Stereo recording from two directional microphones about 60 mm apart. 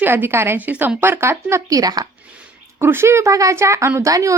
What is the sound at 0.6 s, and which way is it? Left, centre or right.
Speech, right.